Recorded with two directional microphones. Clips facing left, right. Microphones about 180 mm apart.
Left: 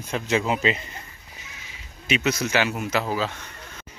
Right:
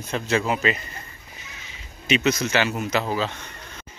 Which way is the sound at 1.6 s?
10° left (ahead or behind).